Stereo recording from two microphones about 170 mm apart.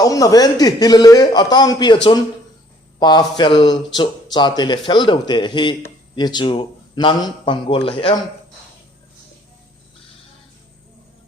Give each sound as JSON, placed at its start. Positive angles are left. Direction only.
{"t": 0.0, "sound": "speech", "side_deg": 20}
{"t": 3.0, "sound": "speech", "side_deg": 25}